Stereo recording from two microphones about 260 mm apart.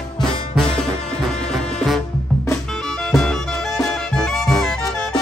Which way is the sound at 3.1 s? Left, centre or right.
Centre.